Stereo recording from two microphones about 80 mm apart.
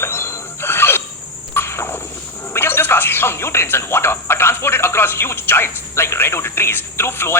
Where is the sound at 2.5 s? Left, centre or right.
Left.